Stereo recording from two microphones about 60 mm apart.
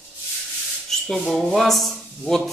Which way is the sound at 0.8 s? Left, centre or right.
Centre.